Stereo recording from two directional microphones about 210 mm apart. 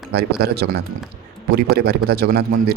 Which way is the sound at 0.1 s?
50° right (ahead or behind).